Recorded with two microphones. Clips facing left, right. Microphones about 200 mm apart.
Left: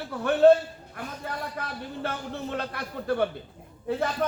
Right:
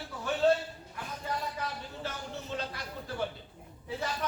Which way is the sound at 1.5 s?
60° left (ahead or behind).